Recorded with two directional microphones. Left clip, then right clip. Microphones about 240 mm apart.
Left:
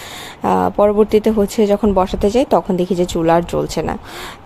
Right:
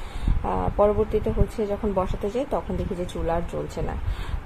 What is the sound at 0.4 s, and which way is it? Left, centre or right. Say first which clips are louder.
Speech: left 9 dB; left.